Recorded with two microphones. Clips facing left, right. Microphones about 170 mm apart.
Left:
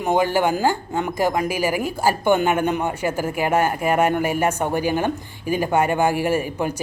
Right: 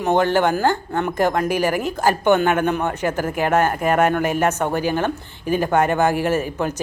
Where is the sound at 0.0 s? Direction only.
10° left (ahead or behind).